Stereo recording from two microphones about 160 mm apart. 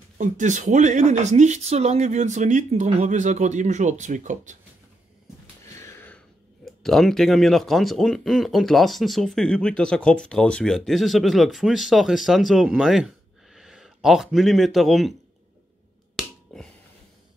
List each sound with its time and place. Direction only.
0.2 s speech: 50° right (ahead or behind)
5.8 s a sound: 15° left (ahead or behind)
6.6 s speech: centre (ahead or behind)
16.5 s finger snapping: centre (ahead or behind)